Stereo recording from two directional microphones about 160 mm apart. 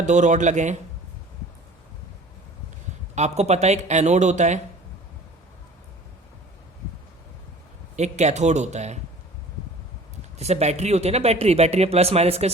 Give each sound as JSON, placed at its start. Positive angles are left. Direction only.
{"t": 0.0, "sound": "speech", "side_deg": -50}
{"t": 3.2, "sound": "speech", "side_deg": -40}
{"t": 7.9, "sound": "speech", "side_deg": -45}
{"t": 10.3, "sound": "a man's voice", "side_deg": -40}